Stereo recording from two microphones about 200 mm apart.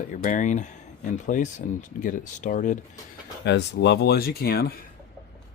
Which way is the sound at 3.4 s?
60° left (ahead or behind).